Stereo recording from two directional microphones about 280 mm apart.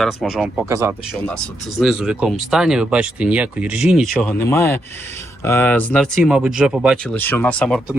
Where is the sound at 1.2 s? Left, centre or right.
Centre.